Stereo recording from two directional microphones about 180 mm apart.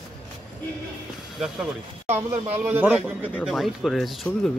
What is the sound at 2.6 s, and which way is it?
Speech, 10° right (ahead or behind).